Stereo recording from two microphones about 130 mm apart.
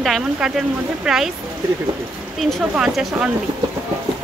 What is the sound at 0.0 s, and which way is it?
Speech, centre (ahead or behind).